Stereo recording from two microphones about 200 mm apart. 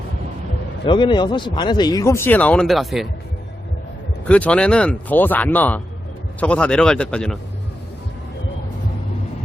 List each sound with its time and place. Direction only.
0.9 s speech: 25° left (ahead or behind); by 3.1 s centre (ahead or behind)
4.3 s speech: 5° left (ahead or behind)